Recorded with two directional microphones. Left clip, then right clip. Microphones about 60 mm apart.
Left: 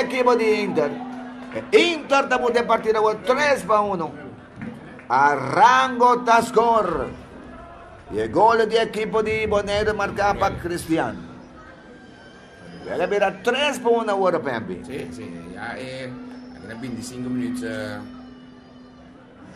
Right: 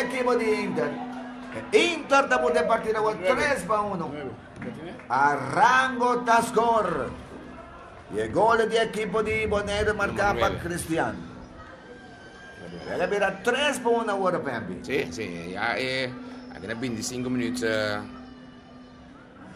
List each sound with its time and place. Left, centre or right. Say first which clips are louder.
0.0 s a man's voice: left 6 dB; centre
8.1 s a man's voice: left 5 dB; centre
12.8 s a man's voice: left 4 dB; centre
14.8 s speech: right 4 dB; right